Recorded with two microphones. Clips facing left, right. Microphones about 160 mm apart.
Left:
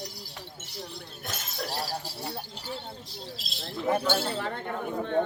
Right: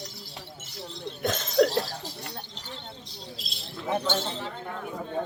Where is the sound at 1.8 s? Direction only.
10° left (ahead or behind).